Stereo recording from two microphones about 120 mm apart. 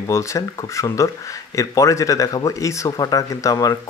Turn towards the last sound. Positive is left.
turn(degrees=30)  # may be behind; listen again after turning